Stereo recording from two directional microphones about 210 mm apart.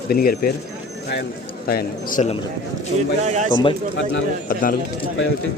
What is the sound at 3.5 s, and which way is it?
Speech, 25° left (ahead or behind).